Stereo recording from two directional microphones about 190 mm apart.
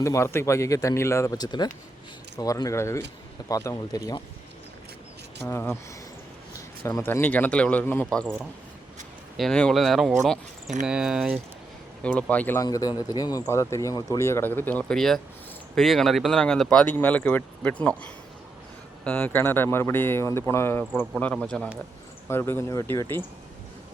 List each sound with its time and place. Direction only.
0.0 s a man's voice: 15° left (ahead or behind)
5.5 s a man's voice: 15° left (ahead or behind); by 11.3 s 5° right (ahead or behind)
12.0 s a man's voice: 5° left (ahead or behind)
12.6 s a man's voice: 20° left (ahead or behind)